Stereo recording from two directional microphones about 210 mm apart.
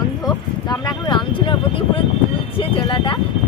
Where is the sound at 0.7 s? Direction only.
20° left (ahead or behind).